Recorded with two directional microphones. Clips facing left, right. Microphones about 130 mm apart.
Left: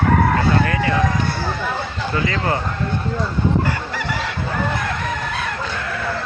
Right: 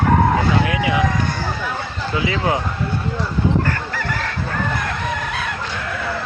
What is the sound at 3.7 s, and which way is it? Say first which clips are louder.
Chicken: even; 10° left (ahead or behind).